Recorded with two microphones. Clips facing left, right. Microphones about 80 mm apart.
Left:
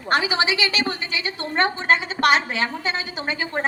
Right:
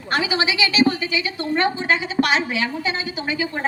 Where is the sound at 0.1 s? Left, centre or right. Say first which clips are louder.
Left 1 dB; left.